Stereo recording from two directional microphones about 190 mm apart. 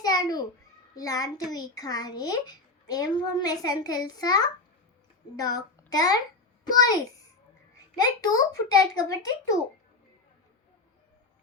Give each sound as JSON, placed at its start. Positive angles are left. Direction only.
{"t": 0.0, "sound": "a sound", "side_deg": 20}
{"t": 0.9, "sound": "a child's voice", "side_deg": 20}
{"t": 8.2, "sound": "a child's voice", "side_deg": 20}